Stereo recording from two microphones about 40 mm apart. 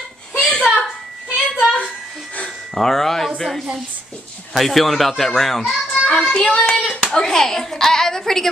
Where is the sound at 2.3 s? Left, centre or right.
Left.